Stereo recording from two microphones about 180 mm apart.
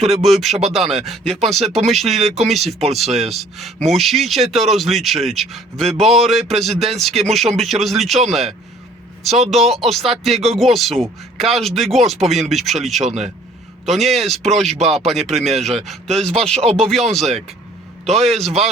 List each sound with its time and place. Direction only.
0.2 s speech: centre (ahead or behind)
13.1 s speech: 35° right (ahead or behind)
13.8 s speech: centre (ahead or behind)